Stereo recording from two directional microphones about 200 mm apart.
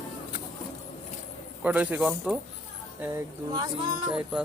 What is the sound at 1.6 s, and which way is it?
Speech, 5° right (ahead or behind).